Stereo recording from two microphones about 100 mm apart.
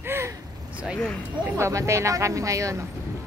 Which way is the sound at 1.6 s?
30° right (ahead or behind).